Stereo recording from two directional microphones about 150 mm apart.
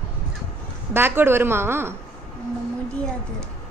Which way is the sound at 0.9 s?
15° right (ahead or behind).